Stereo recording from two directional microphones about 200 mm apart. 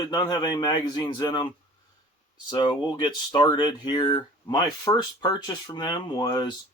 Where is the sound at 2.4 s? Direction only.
25° left (ahead or behind).